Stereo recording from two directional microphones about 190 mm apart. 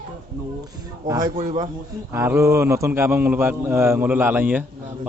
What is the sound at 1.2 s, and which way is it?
Speech, 40° right (ahead or behind).